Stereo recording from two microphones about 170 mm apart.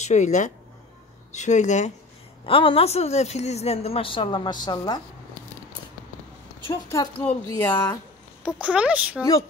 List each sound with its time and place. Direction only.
0.0 s speech: 45° left (ahead or behind)
2.4 s a woman's voice: 30° left (ahead or behind)
6.7 s a woman's voice: 15° left (ahead or behind)
8.5 s speech: 5° right (ahead or behind)